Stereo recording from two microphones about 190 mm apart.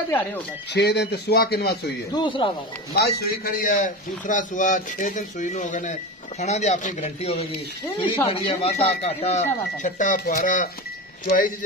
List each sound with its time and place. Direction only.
0.7 s speech: 60° left (ahead or behind)
2.1 s speech: 25° left (ahead or behind)
2.9 s a man's voice: 55° left (ahead or behind)